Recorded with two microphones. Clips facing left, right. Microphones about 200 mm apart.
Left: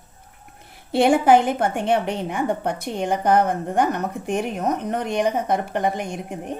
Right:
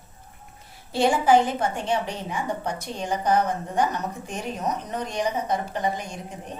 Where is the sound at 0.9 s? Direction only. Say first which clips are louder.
Left 4 dB; 60° left (ahead or behind).